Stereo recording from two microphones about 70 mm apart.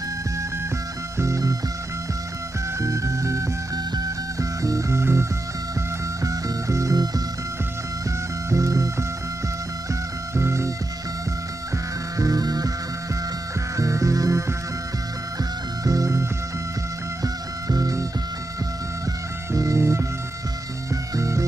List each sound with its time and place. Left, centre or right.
1.1 s music: right
2.8 s music: right
6.2 s music: right
8.5 s music: right
10.3 s music: right
12.2 s music: right
13.7 s music: right
15.8 s music: right
19.5 s music: right